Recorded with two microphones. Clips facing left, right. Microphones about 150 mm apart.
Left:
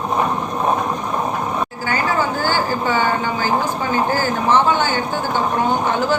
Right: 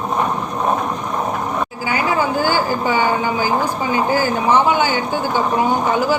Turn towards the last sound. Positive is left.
turn(degrees=-10)  # may be behind; listen again after turning